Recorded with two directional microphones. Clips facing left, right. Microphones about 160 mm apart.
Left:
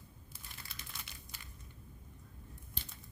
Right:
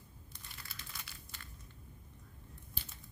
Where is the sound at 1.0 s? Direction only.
15° left (ahead or behind).